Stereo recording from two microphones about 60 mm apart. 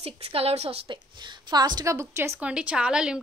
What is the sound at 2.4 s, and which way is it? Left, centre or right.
Speech, centre.